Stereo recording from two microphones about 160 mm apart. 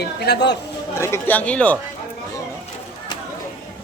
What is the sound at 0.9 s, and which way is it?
Speech, 15° left (ahead or behind).